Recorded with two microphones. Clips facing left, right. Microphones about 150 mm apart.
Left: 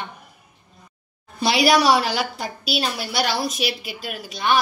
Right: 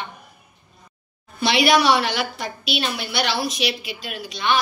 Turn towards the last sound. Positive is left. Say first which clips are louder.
# left 1 dB
turn(degrees=45)  # may be behind; listen again after turning